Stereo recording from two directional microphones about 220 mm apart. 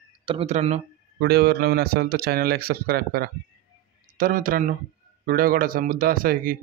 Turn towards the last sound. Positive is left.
turn(degrees=-40)  # may be behind; listen again after turning